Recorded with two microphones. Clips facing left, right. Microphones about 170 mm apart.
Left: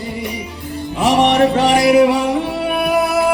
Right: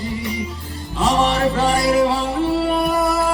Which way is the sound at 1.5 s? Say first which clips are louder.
Left 5 dB; 80° left.